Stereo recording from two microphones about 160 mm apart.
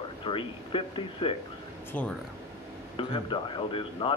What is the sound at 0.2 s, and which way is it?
Speech, 35° left (ahead or behind).